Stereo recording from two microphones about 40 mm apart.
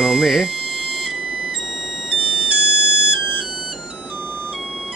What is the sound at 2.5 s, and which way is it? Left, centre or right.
Music, right.